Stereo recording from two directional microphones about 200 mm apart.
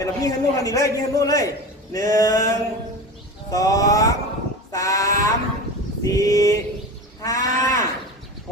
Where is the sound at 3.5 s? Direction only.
15° left (ahead or behind).